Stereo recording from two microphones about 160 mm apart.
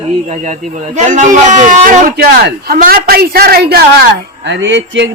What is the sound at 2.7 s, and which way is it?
A man's voice, 65° right (ahead or behind).